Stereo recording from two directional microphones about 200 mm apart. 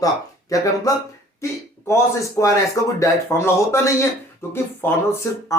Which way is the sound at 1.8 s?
15° left (ahead or behind).